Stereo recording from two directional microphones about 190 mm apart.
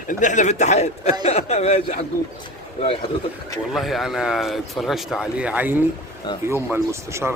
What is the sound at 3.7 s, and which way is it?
Speech, centre (ahead or behind).